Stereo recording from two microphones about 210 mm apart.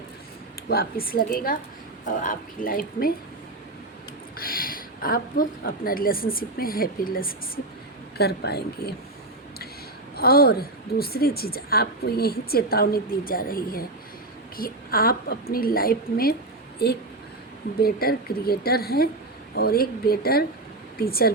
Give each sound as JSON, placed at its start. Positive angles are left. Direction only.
{"t": 0.7, "sound": "a woman's voice", "side_deg": 45}
{"t": 4.4, "sound": "a woman's voice", "side_deg": 45}
{"t": 10.2, "sound": "a woman's voice", "side_deg": 45}